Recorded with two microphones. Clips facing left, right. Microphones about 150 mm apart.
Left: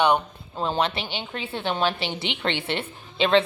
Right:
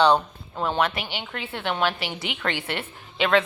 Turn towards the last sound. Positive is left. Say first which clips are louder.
# left 1 dB
turn(degrees=25)  # may be behind; listen again after turning